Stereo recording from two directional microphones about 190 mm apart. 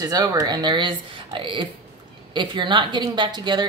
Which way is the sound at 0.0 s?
20° right (ahead or behind).